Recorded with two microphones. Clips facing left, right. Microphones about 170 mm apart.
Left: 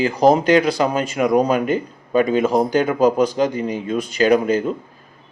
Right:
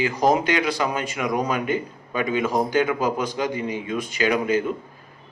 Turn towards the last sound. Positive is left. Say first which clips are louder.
# left 6 dB
turn(degrees=40)  # may be behind; listen again after turning